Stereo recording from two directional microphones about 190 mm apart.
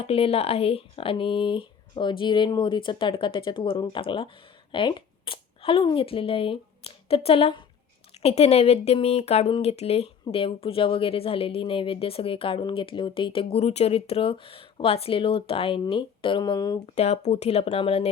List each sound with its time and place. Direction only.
0.0 s speech: 30° left (ahead or behind)
16.8 s speech: 35° left (ahead or behind)